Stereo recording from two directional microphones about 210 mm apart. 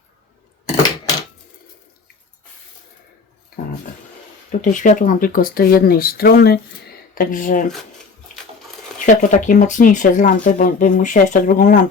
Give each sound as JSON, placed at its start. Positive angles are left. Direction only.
{"t": 4.6, "sound": "speech", "side_deg": 35}
{"t": 9.0, "sound": "speech", "side_deg": 40}